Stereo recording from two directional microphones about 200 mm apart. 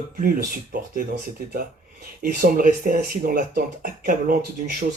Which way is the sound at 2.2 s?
45° right (ahead or behind).